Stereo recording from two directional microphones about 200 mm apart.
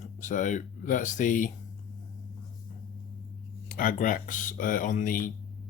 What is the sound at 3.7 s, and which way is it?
Speech, 45° left (ahead or behind).